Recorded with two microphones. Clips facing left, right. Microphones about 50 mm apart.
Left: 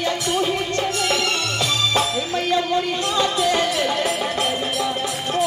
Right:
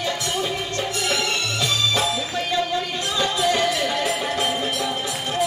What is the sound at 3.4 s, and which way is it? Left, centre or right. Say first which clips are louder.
Music: left 1 dB; left.